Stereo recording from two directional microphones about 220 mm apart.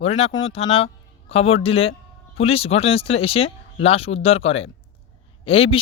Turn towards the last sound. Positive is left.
turn(degrees=25)  # may be behind; listen again after turning